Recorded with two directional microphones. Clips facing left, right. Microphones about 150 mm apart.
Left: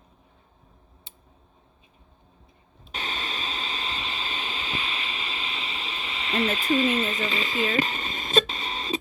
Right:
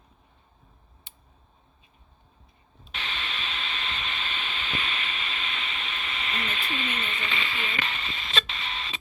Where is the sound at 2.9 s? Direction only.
40° left (ahead or behind).